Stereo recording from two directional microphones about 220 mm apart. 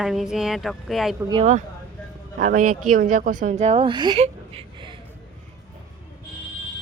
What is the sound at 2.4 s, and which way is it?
Speech, 35° right (ahead or behind).